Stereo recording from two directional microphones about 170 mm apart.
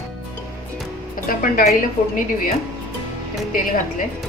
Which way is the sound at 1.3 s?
55° left (ahead or behind).